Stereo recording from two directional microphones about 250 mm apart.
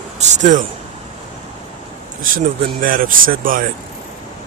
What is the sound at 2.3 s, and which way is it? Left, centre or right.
Speech, right.